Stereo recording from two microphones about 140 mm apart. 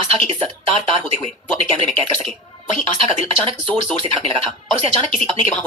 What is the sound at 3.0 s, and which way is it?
Speech, 45° right (ahead or behind).